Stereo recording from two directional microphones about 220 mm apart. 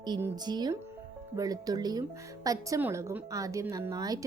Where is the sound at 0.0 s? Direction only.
20° right (ahead or behind).